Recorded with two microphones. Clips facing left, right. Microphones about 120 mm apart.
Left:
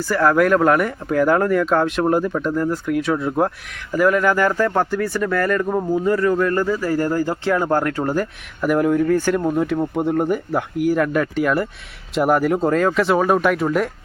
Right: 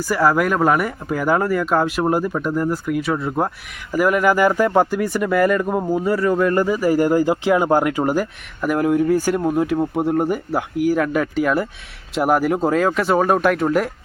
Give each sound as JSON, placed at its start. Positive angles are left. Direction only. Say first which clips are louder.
{"t": 0.0, "sound": "speech", "louder": "left 1 dB", "side_deg": -10}